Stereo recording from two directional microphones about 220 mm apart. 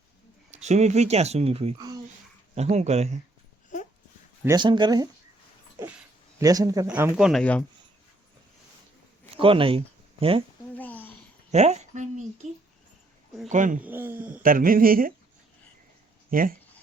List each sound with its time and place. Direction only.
0.5 s speech: 30° right (ahead or behind)
4.4 s speech: 20° right (ahead or behind)
6.4 s speech: 15° right (ahead or behind); by 7.6 s 5° left (ahead or behind)
9.3 s speech: 25° right (ahead or behind)
10.8 s a sound: 10° left (ahead or behind)
11.5 s a woman's voice: 30° right (ahead or behind)
13.5 s speech: 35° right (ahead or behind)
13.8 s speech: 10° right (ahead or behind)
14.4 s speech: 40° right (ahead or behind)
16.3 s speech: 40° right (ahead or behind)